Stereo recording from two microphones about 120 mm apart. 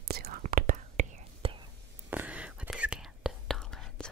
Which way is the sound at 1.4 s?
50° right (ahead or behind).